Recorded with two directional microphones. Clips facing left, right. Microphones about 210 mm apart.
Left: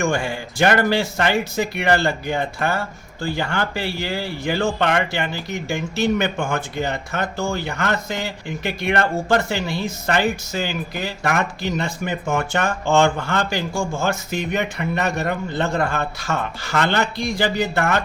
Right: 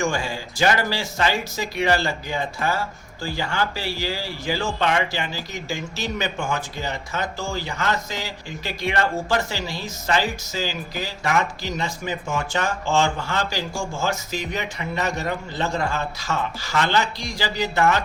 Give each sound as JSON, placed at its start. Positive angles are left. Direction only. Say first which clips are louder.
{"t": 0.0, "sound": "a man's voice", "louder": "left 3 dB", "side_deg": 60}